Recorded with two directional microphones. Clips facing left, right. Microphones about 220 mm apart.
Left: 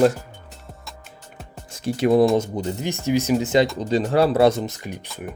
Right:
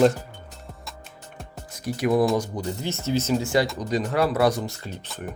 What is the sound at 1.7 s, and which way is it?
Speech, 25° left (ahead or behind).